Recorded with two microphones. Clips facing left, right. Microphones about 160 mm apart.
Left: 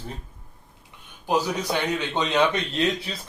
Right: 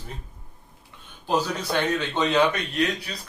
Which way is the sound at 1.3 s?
15° left (ahead or behind).